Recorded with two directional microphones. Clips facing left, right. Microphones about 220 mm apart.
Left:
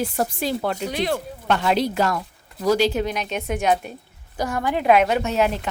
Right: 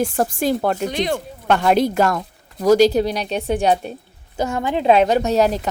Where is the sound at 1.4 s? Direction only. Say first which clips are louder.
Right 5 dB; 50° right (ahead or behind).